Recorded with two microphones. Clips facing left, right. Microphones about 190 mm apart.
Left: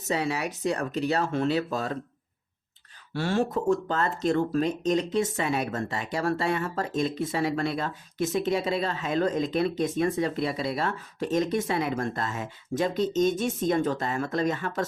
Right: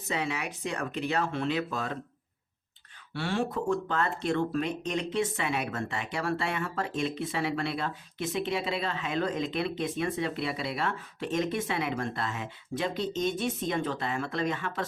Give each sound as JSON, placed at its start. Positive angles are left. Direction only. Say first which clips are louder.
{"t": 0.1, "sound": "speech", "louder": "left 4 dB", "side_deg": 40}
{"t": 3.1, "sound": "speech", "louder": "left 4 dB", "side_deg": 40}